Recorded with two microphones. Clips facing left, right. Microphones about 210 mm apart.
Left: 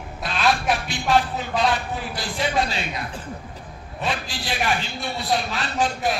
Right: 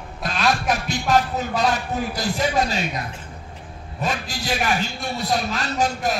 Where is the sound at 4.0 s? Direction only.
45° right (ahead or behind).